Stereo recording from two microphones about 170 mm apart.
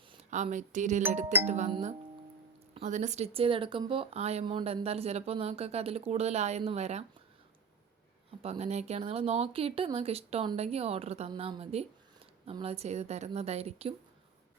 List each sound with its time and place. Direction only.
0.3 s speech: 45° right (ahead or behind)
8.4 s speech: 40° right (ahead or behind)